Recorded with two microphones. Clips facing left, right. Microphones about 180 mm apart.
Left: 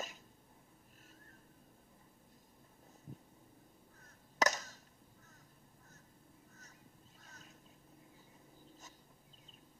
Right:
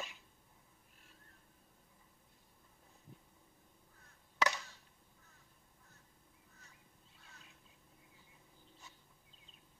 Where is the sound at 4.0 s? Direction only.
40° left (ahead or behind).